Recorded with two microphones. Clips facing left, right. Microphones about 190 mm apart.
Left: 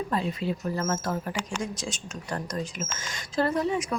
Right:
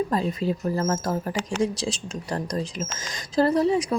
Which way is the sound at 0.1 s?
40° right (ahead or behind).